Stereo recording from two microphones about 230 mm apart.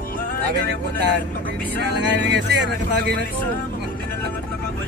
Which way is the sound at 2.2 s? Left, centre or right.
Right.